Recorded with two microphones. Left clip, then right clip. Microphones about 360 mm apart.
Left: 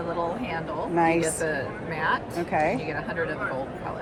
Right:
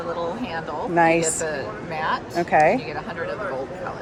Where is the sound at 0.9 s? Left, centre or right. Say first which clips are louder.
Right 5 dB; right.